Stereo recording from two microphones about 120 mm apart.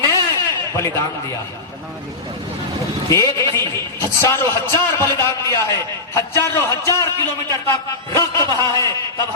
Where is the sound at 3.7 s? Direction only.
25° left (ahead or behind).